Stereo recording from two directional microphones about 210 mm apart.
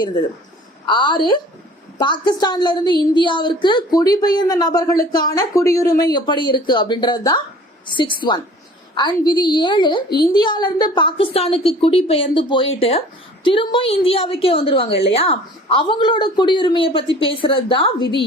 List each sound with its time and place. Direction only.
0.9 s speech: 20° left (ahead or behind)